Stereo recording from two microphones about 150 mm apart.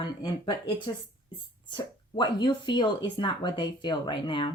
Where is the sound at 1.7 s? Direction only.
30° left (ahead or behind).